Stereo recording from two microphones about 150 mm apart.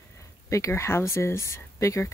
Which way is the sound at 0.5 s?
20° left (ahead or behind).